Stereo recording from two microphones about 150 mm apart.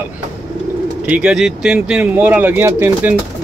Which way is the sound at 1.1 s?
5° right (ahead or behind).